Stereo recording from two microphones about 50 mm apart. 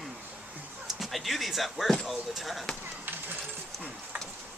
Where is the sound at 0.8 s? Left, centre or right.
Centre.